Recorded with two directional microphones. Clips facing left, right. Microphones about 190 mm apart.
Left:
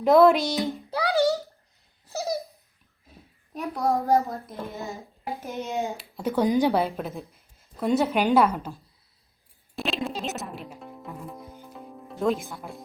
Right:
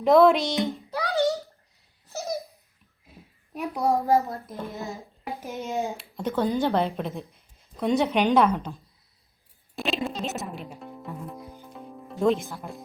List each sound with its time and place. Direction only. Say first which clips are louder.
0.0 s a woman's voice: even; centre (ahead or behind)
0.9 s a sound: left 3 dB; 30° left (ahead or behind)
3.1 s a sound: right 1 dB; 10° right (ahead or behind)
4.0 s a woman's voice: even; centre (ahead or behind)
5.4 s a child's voice: even; 10° right (ahead or behind)
5.7 s speech: right 2 dB; centre (ahead or behind)
6.8 s a woman's voice: right 1 dB; centre (ahead or behind)
9.7 s music: right 1 dB; centre (ahead or behind)